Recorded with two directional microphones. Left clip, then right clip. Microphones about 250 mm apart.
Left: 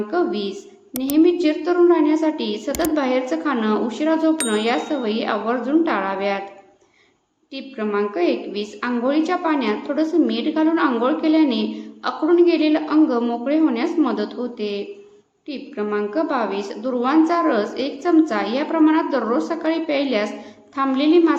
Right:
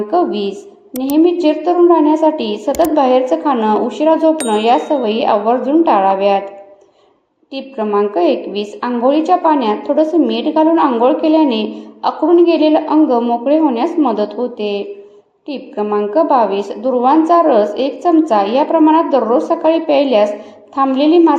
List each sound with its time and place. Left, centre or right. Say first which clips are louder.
0.1 s a woman's voice: right 8 dB; centre
7.5 s a woman's voice: right 7 dB; centre